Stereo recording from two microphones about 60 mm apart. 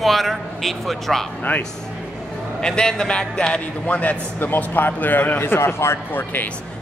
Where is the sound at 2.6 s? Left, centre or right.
Centre.